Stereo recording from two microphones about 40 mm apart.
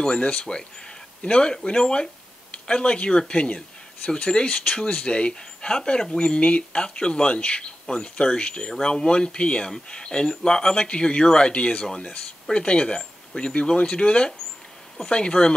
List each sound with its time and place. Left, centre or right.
0.0 s speech: left